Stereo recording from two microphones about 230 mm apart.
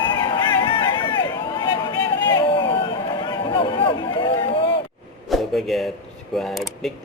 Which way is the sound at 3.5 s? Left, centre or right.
Left.